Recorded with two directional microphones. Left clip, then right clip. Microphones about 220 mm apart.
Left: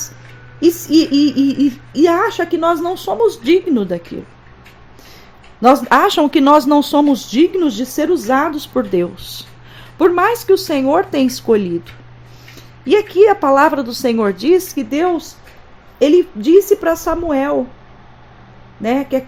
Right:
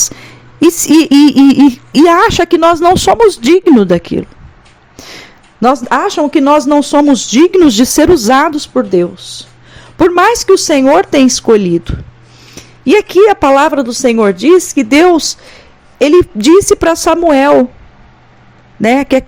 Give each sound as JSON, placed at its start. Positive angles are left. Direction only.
{"t": 0.6, "sound": "speech", "side_deg": -35}
{"t": 4.9, "sound": "a sound", "side_deg": -30}
{"t": 5.9, "sound": "a woman's voice", "side_deg": -10}
{"t": 8.5, "sound": "a woman's voice", "side_deg": -15}
{"t": 18.8, "sound": "speech", "side_deg": -30}